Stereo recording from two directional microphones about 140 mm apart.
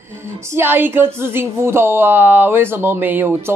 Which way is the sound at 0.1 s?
20° right (ahead or behind).